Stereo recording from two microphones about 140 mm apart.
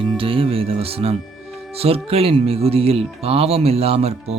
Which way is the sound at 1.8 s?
45° right (ahead or behind).